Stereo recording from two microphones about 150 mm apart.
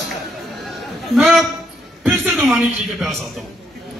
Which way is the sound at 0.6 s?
Centre (ahead or behind).